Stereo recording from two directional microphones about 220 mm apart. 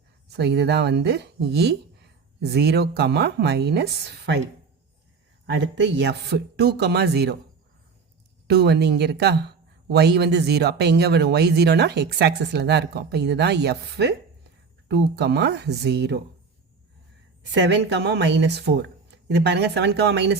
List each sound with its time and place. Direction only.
0.3 s speech: 50° right (ahead or behind)
5.5 s speech: 50° right (ahead or behind)
8.4 s speech: 50° right (ahead or behind)
17.5 s speech: 50° right (ahead or behind)